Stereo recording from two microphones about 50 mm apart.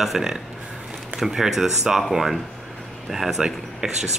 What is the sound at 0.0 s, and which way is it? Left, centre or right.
Speech, centre.